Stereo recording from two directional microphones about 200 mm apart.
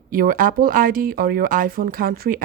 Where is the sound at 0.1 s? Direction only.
45° right (ahead or behind).